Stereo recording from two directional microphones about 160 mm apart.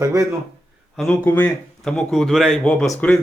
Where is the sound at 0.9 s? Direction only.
5° left (ahead or behind).